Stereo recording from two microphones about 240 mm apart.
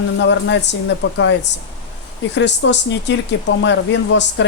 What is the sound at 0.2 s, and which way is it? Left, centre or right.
Speech, left.